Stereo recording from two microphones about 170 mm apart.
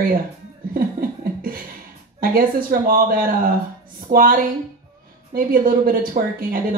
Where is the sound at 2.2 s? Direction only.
55° right (ahead or behind).